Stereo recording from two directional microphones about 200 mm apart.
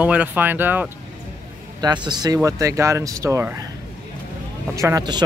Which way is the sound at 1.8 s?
20° right (ahead or behind).